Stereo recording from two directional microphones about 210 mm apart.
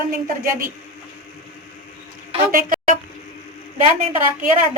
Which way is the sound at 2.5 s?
40° right (ahead or behind).